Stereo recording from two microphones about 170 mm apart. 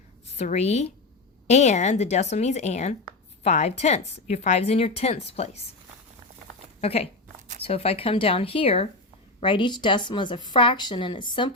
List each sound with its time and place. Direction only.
0.3 s speech: 40° left (ahead or behind)
6.8 s a woman's voice: 35° left (ahead or behind)